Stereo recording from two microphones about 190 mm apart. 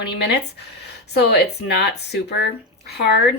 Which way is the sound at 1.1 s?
60° left (ahead or behind).